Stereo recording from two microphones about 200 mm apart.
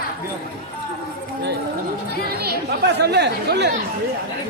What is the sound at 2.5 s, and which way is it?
Speech, 55° right (ahead or behind).